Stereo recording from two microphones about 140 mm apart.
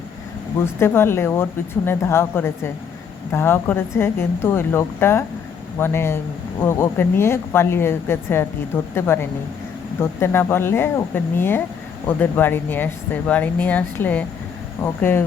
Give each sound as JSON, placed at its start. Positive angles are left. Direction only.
{"t": 0.6, "sound": "speech", "side_deg": 15}